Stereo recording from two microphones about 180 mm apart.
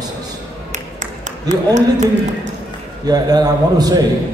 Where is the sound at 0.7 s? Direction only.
40° right (ahead or behind).